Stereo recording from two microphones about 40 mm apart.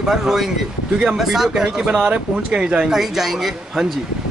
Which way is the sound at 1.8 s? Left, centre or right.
Centre.